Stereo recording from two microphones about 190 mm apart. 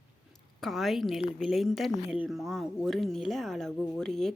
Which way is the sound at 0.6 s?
Centre (ahead or behind).